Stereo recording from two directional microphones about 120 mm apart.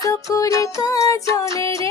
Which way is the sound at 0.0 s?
25° left (ahead or behind).